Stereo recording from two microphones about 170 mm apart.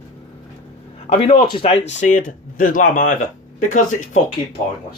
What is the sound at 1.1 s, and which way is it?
Speech, 30° left (ahead or behind).